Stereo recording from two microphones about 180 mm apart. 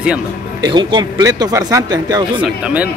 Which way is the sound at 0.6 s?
25° right (ahead or behind).